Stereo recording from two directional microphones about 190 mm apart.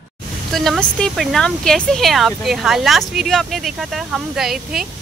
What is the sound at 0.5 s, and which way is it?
Speech, centre (ahead or behind).